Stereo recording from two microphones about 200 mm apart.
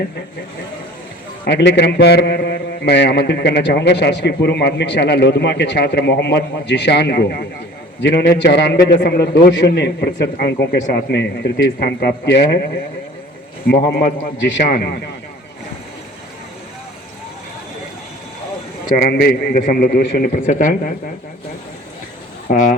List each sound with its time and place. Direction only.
1.5 s a man's voice: 60° left (ahead or behind)
13.7 s a man's voice: 55° left (ahead or behind)
18.9 s a man's voice: 50° left (ahead or behind)
20.3 s speech: 40° left (ahead or behind)
22.4 s speech: 40° left (ahead or behind)